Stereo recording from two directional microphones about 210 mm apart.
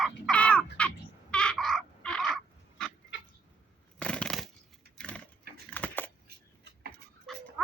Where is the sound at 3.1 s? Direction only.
60° left (ahead or behind).